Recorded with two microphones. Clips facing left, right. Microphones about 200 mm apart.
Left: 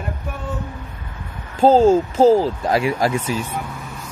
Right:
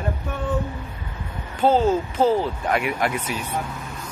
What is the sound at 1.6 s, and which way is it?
Speech, 35° left (ahead or behind).